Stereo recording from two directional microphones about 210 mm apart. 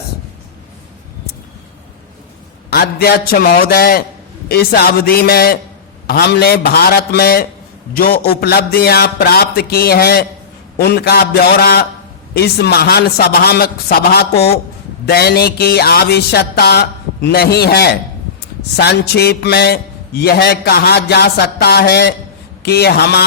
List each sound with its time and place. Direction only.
2.6 s a man's voice: 50° left (ahead or behind)